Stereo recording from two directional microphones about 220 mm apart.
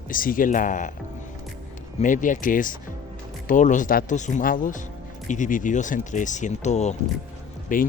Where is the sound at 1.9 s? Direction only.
35° left (ahead or behind).